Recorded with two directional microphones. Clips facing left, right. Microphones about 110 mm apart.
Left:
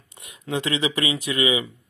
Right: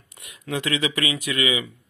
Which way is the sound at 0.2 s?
30° left (ahead or behind).